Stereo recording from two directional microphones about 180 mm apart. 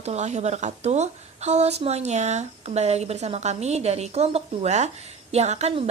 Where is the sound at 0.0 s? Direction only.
40° right (ahead or behind).